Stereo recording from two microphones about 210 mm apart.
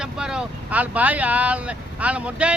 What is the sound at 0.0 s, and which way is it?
Speech, 5° right (ahead or behind).